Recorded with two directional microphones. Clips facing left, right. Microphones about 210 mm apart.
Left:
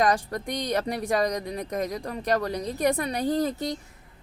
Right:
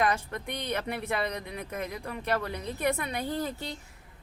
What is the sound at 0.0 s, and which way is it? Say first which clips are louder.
Speech: left 5 dB; 35° left (ahead or behind).